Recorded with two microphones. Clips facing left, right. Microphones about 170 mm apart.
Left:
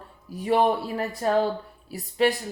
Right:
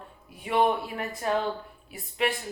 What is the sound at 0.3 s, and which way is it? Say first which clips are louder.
A woman's voice: left 3 dB; 40° left (ahead or behind).